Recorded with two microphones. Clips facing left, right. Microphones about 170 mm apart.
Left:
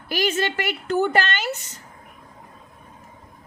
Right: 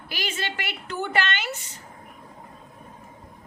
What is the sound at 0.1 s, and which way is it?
A woman's voice, 45° left (ahead or behind).